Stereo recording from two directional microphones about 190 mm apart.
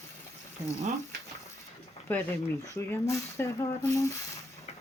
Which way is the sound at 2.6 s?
15° left (ahead or behind).